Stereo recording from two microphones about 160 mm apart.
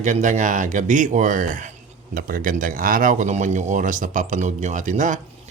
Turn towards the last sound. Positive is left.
turn(degrees=-50)  # may be behind; listen again after turning